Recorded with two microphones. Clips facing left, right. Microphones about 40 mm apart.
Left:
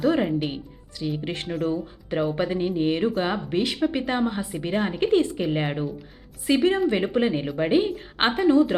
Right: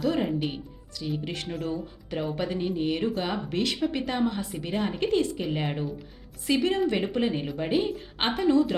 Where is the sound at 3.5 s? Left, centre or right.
Centre.